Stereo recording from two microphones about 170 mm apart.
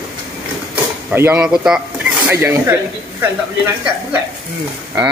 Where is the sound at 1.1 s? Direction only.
10° right (ahead or behind).